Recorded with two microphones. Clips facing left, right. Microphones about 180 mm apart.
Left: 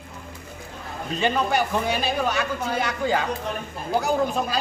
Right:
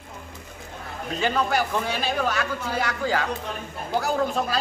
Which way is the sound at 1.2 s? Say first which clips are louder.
Left 1 dB; 20° left (ahead or behind).